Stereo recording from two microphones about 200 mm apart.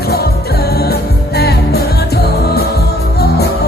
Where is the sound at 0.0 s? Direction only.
50° left (ahead or behind).